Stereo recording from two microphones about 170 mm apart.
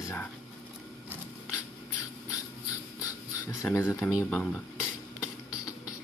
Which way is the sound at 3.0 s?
20° left (ahead or behind).